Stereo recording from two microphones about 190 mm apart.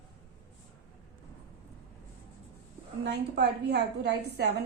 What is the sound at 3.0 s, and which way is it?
A woman's voice, 60° right (ahead or behind).